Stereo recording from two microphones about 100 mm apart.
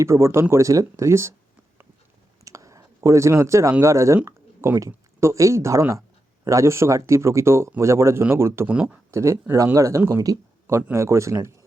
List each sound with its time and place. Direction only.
0.0 s speech: 30° right (ahead or behind)
2.4 s speech: 35° right (ahead or behind)
8.6 s speech: 15° right (ahead or behind)
9.1 s speech: 25° right (ahead or behind)